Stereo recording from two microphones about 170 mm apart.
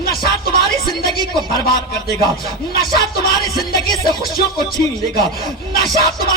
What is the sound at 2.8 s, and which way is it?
Speech, 60° left (ahead or behind).